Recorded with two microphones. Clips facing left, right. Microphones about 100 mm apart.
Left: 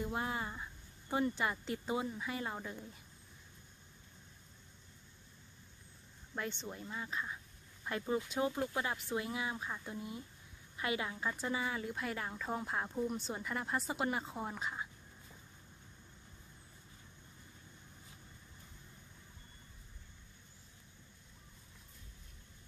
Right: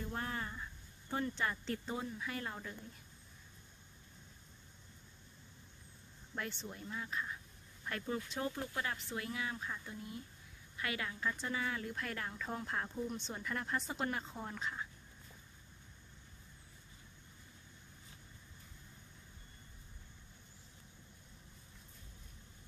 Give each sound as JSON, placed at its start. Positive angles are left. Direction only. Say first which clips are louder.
{"t": 0.0, "sound": "a woman's voice", "louder": "left 3 dB", "side_deg": 10}
{"t": 6.3, "sound": "a woman's voice", "louder": "left 2 dB", "side_deg": 0}